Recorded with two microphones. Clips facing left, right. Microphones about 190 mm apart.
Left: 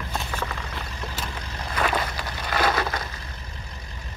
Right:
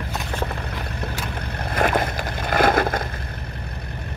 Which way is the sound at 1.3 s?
60° right (ahead or behind).